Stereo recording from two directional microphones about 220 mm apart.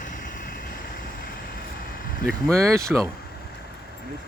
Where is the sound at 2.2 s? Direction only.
Centre (ahead or behind).